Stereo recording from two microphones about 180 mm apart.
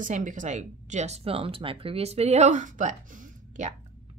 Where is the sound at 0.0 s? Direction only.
45° right (ahead or behind).